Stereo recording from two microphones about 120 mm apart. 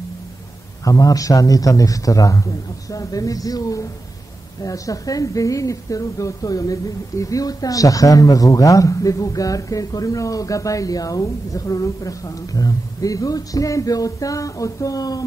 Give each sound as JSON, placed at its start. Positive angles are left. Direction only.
{"t": 0.8, "sound": "a woman's voice", "side_deg": 30}